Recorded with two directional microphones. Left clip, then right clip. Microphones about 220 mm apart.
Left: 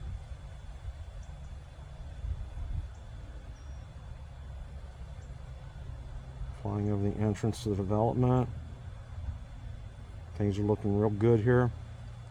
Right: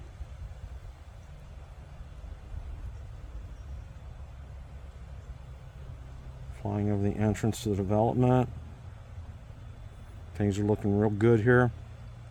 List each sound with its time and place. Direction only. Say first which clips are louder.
6.6 s speech: right 2 dB; 40° right (ahead or behind)
10.3 s speech: right 2 dB; 35° right (ahead or behind)